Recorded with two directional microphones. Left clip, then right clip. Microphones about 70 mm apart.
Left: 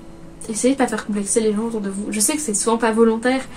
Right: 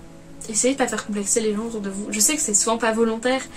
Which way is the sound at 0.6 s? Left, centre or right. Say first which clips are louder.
Left 3 dB; centre.